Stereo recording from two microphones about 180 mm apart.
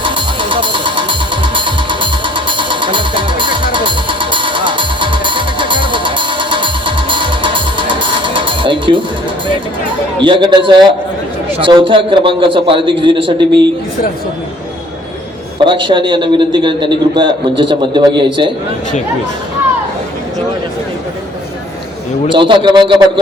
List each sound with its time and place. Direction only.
0.0 s music: 25° right (ahead or behind)
10.2 s a man's voice: 25° right (ahead or behind)
15.5 s a man's voice: 25° right (ahead or behind)
22.3 s a man's voice: 25° right (ahead or behind)